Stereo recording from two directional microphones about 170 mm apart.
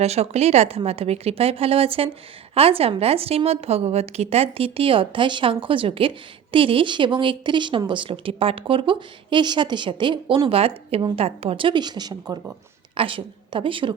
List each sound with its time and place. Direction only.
0.0 s a woman's voice: 40° right (ahead or behind)